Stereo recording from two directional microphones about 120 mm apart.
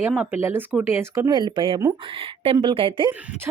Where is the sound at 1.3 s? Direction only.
40° right (ahead or behind).